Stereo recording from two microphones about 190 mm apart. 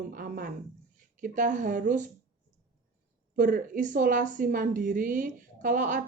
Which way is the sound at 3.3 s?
45° right (ahead or behind).